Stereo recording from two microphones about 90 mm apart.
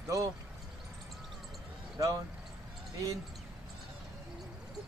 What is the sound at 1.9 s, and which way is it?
Speech, 40° right (ahead or behind).